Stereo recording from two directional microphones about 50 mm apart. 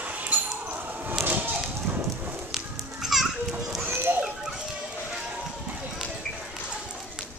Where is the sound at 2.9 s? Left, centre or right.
Centre.